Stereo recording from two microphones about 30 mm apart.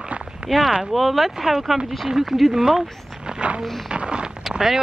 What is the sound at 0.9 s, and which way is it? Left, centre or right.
Speech, centre.